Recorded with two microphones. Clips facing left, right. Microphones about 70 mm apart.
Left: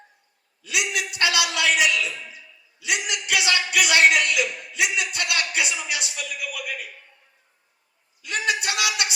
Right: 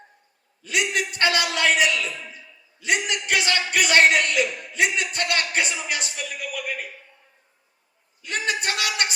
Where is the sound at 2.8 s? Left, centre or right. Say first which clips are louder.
Right 3 dB; right.